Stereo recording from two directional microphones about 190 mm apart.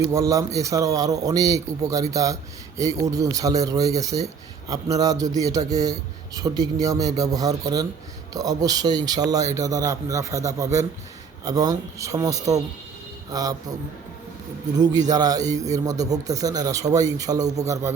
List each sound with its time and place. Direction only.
0.1 s a man's voice: 15° right (ahead or behind)
15.1 s a man's voice: 20° right (ahead or behind)